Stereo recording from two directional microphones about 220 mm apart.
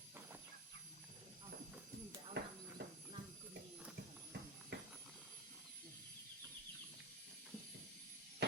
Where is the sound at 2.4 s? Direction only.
50° right (ahead or behind).